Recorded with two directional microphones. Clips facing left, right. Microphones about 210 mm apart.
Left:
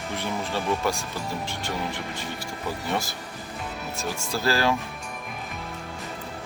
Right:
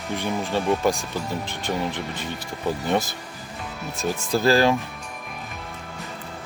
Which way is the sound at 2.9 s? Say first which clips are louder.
Right 5 dB; 20° right (ahead or behind).